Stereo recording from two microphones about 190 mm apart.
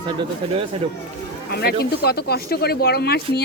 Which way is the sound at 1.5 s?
60° left (ahead or behind).